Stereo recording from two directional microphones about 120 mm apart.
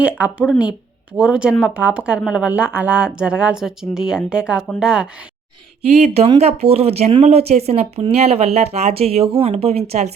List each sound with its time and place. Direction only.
0.0 s speech: 10° right (ahead or behind)
6.0 s speech: 55° right (ahead or behind)